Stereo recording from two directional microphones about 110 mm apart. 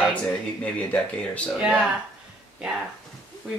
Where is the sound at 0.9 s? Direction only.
10° left (ahead or behind).